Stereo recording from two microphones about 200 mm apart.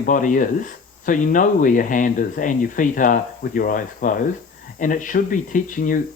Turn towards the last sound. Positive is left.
turn(degrees=40)  # may be behind; listen again after turning